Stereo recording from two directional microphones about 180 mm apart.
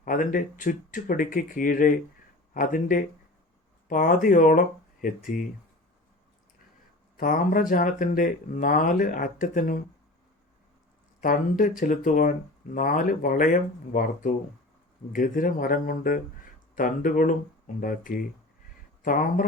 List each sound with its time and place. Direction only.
0.0 s speech: 50° left (ahead or behind)
7.2 s speech: 50° left (ahead or behind)
11.2 s speech: 50° left (ahead or behind)